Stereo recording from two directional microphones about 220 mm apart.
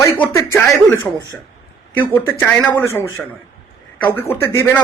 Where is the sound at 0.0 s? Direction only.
15° left (ahead or behind).